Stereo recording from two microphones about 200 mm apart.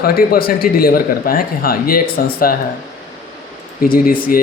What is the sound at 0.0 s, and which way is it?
Speech, 50° left (ahead or behind).